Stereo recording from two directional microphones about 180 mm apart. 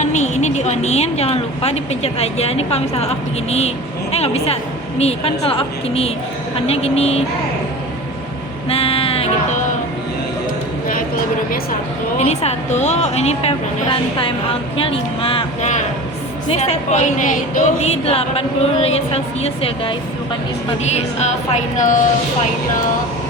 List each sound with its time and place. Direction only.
0.0 s a woman's voice: 40° left (ahead or behind)
8.7 s music: 30° left (ahead or behind)
12.2 s a woman's voice: 35° left (ahead or behind)
14.8 s a woman's voice: 30° left (ahead or behind)
16.5 s a woman's voice: 40° left (ahead or behind)